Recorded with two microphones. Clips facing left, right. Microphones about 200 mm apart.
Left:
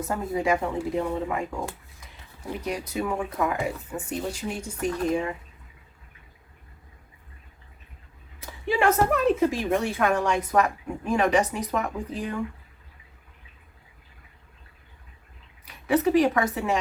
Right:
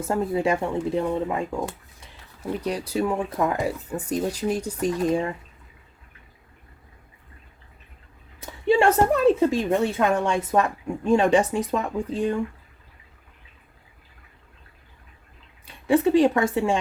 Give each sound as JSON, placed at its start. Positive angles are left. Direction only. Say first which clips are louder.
{"t": 0.1, "sound": "a woman's voice", "louder": "right 3 dB", "side_deg": -30}
{"t": 2.6, "sound": "speech", "louder": "right 4 dB", "side_deg": -35}
{"t": 8.6, "sound": "a woman's voice", "louder": "right 4 dB", "side_deg": -30}
{"t": 15.6, "sound": "a woman's voice", "louder": "right 3 dB", "side_deg": -30}